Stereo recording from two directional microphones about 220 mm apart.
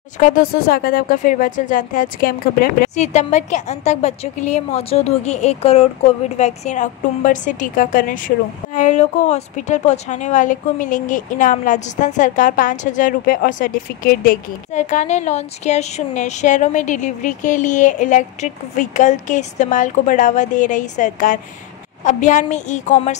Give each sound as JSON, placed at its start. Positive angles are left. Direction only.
{"t": 0.2, "sound": "speech", "side_deg": 40}